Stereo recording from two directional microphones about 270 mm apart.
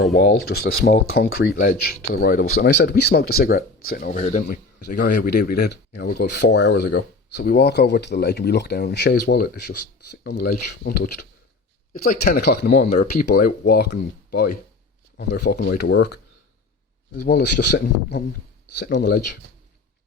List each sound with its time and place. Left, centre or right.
0.1 s speech: left